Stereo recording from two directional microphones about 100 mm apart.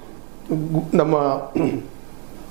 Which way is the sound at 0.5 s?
20° right (ahead or behind).